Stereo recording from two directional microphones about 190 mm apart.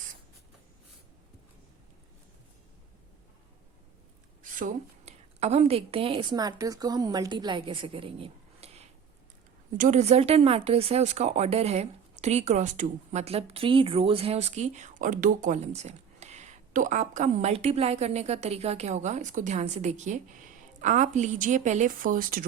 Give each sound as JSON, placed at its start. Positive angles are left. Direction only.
{"t": 4.4, "sound": "a woman's voice", "side_deg": -45}